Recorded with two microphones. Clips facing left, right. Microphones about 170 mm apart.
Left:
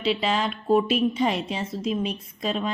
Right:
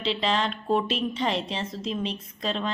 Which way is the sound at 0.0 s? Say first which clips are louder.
Left 2 dB; 10° left (ahead or behind).